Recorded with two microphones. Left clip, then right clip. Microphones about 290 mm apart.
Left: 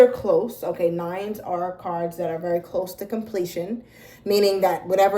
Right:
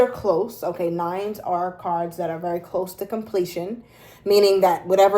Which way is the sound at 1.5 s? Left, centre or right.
Centre.